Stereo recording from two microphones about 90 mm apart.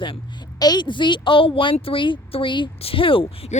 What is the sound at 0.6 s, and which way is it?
A woman's voice, 50° left (ahead or behind).